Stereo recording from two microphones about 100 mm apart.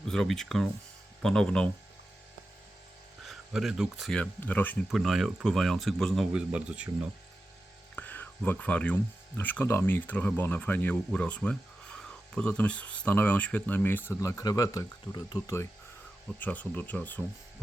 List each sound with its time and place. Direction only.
0.1 s speech: 5° left (ahead or behind)
3.2 s speech: centre (ahead or behind)
4.2 s speech: 15° left (ahead or behind)
4.9 s speech: centre (ahead or behind)
6.3 s speech: 10° right (ahead or behind)
7.9 s a sound: 15° left (ahead or behind)
9.4 s speech: 15° left (ahead or behind)
14.2 s speech: 35° left (ahead or behind)
16.4 s speech: 15° left (ahead or behind)